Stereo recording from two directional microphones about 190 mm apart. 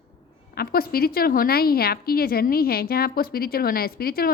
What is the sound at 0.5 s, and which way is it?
A woman's voice, 55° left (ahead or behind).